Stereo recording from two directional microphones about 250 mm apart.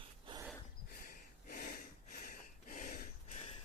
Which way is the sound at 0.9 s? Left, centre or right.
Left.